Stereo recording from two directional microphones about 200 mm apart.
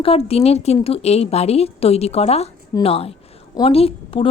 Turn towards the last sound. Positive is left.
turn(degrees=30)  # may be behind; listen again after turning